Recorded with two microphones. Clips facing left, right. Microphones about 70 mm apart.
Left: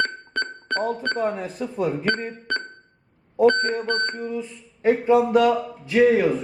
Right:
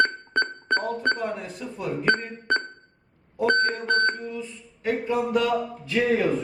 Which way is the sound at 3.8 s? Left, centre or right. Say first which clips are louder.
Right 2 dB; right.